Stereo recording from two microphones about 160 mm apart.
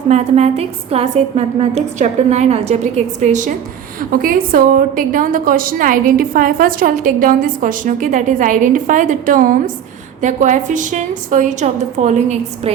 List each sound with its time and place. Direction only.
0.1 s a woman's voice: 40° right (ahead or behind)
4.1 s a woman's voice: 60° right (ahead or behind); by 12.7 s 45° right (ahead or behind)